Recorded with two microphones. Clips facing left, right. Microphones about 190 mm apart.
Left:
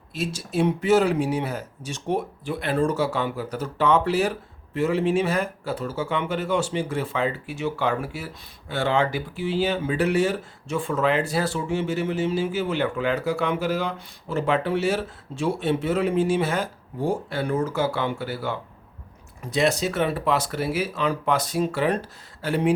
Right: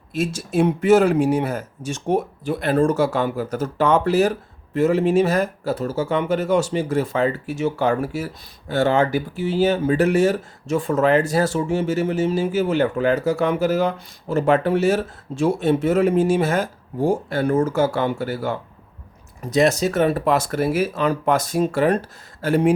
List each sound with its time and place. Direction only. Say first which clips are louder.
0.1 s speech: right 5 dB; 50° right (ahead or behind)